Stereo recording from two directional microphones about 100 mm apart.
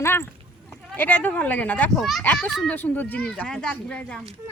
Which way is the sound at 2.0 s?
Centre (ahead or behind).